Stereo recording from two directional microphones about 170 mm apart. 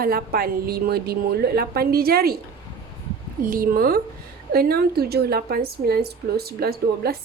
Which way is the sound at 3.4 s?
55° right (ahead or behind).